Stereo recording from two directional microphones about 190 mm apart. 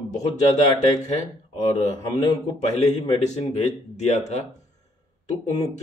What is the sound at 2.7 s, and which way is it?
A man's voice, 35° left (ahead or behind).